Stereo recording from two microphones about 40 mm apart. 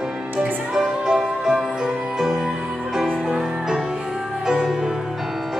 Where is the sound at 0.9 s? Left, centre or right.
Centre.